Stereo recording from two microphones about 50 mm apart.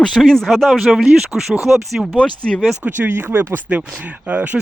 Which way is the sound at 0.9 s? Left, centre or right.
Centre.